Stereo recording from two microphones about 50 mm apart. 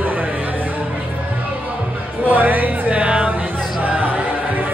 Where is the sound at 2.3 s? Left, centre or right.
Right.